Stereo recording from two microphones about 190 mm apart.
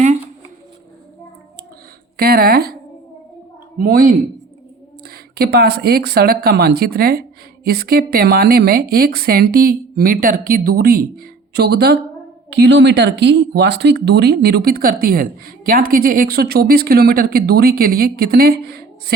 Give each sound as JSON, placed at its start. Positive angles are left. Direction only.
{"t": 2.1, "sound": "speech", "side_deg": -50}
{"t": 3.8, "sound": "speech", "side_deg": -45}